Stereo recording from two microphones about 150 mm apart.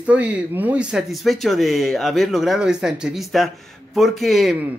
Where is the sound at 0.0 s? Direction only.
10° right (ahead or behind).